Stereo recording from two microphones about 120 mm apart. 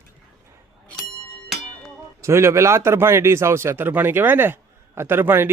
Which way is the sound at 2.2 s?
20° right (ahead or behind).